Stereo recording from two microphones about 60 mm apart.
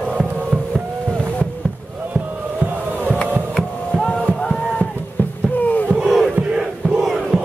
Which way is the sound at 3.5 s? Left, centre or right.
Centre.